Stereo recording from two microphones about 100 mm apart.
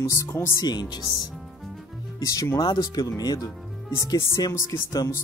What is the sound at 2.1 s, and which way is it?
Speech, 35° left (ahead or behind).